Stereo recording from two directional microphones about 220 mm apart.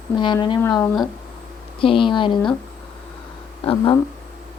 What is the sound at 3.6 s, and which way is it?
Speech, 20° left (ahead or behind).